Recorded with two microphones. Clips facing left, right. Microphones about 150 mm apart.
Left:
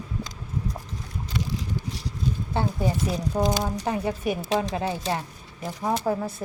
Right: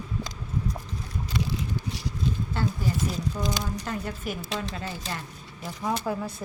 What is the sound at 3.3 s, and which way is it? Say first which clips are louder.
Speech: left 6 dB; 60° left (ahead or behind).